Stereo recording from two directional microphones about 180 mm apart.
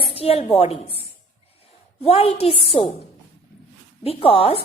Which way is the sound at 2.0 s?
35° left (ahead or behind).